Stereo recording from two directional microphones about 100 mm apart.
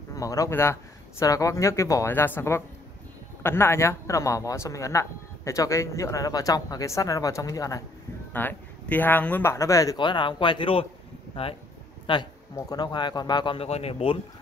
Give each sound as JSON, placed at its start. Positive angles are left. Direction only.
{"t": 0.1, "sound": "a man's voice", "side_deg": 35}
{"t": 8.3, "sound": "speech", "side_deg": 20}
{"t": 9.9, "sound": "speech", "side_deg": 50}
{"t": 12.1, "sound": "speech", "side_deg": 55}
{"t": 12.6, "sound": "speech", "side_deg": 45}
{"t": 13.6, "sound": "speech", "side_deg": 90}